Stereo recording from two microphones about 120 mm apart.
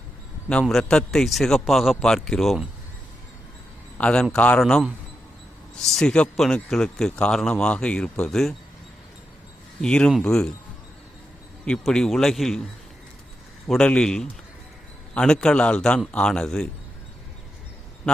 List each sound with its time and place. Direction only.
0.7 s a man's voice: 5° left (ahead or behind)
3.9 s a man's voice: 10° left (ahead or behind)
9.8 s a man's voice: 5° left (ahead or behind)
11.6 s a man's voice: 5° left (ahead or behind)
13.7 s a man's voice: 5° left (ahead or behind)
18.0 s a sound: 5° left (ahead or behind)